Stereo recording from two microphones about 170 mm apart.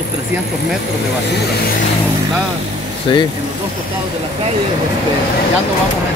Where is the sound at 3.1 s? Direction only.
25° left (ahead or behind).